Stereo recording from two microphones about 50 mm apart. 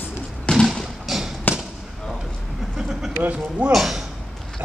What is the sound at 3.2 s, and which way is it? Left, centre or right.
Speech, right.